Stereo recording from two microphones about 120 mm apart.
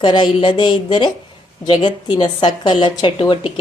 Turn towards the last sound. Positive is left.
turn(degrees=45)  # may be behind; listen again after turning